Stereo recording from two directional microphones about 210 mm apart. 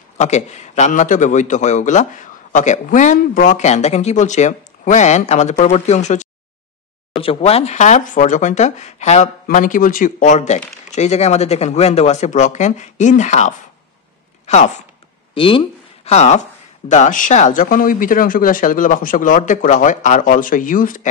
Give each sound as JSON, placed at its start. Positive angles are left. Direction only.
{"t": 0.2, "sound": "speech", "side_deg": 35}
{"t": 14.4, "sound": "a sound", "side_deg": 35}
{"t": 15.3, "sound": "speech", "side_deg": 25}